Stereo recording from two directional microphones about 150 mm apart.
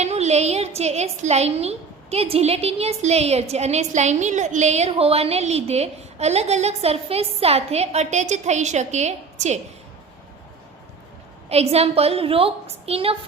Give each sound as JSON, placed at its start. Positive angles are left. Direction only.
{"t": 0.0, "sound": "a sound", "side_deg": -50}
{"t": 0.8, "sound": "a woman's voice", "side_deg": -45}
{"t": 11.4, "sound": "a woman's voice", "side_deg": -45}